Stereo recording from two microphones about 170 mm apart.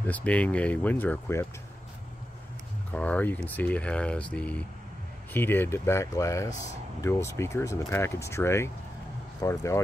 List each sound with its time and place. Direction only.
0.0 s speech: 10° left (ahead or behind)
2.9 s speech: 10° left (ahead or behind)